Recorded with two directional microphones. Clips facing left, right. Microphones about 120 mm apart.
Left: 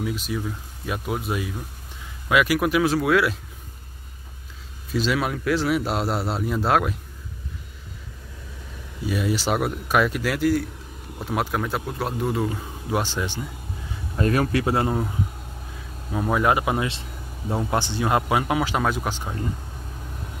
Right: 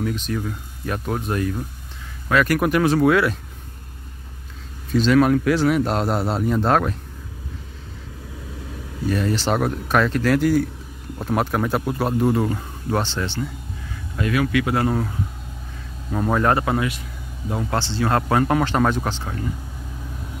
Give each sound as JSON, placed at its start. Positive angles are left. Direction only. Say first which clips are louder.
{"t": 0.0, "sound": "speech", "louder": "right 3 dB", "side_deg": 5}
{"t": 4.9, "sound": "speech", "louder": "right 8 dB", "side_deg": 5}
{"t": 9.0, "sound": "speech", "louder": "right 3 dB", "side_deg": 10}
{"t": 14.1, "sound": "speech", "louder": "right 1 dB", "side_deg": 40}
{"t": 14.9, "sound": "speech", "louder": "right 2 dB", "side_deg": 10}
{"t": 16.8, "sound": "vehicle", "louder": "right 3 dB", "side_deg": 25}
{"t": 17.6, "sound": "speech", "louder": "right 2 dB", "side_deg": 15}